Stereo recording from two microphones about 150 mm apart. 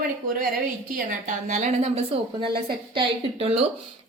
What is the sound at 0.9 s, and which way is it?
A woman's voice, 60° right (ahead or behind).